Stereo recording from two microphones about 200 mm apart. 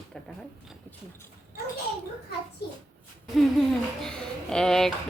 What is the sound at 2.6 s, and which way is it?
Speech, 55° left (ahead or behind).